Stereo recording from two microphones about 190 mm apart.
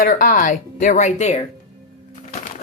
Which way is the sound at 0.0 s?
45° left (ahead or behind).